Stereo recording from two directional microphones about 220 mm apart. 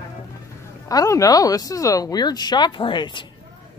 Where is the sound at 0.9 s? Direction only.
15° left (ahead or behind).